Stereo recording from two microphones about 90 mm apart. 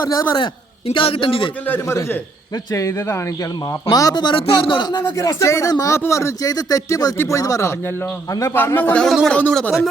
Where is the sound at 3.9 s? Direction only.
50° left (ahead or behind).